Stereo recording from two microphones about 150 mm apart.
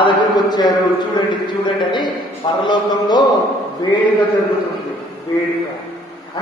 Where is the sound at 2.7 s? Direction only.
30° left (ahead or behind).